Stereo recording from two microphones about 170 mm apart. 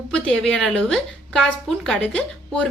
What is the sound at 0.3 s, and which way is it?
A woman's voice, 5° left (ahead or behind).